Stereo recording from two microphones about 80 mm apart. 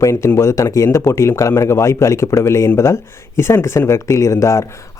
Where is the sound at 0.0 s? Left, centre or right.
Left.